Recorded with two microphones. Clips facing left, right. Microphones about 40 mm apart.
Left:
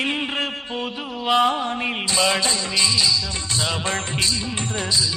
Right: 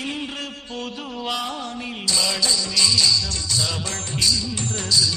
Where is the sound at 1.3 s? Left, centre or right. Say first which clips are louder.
Left 10 dB; left.